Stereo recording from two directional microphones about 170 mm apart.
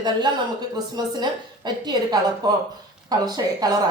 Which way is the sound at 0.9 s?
25° right (ahead or behind).